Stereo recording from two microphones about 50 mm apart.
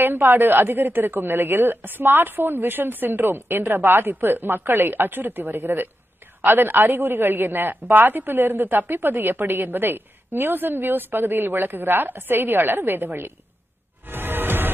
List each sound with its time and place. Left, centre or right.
0.0 s a man's voice: right
14.0 s music: right